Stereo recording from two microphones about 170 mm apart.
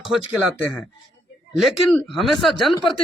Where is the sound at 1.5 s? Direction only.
Centre (ahead or behind).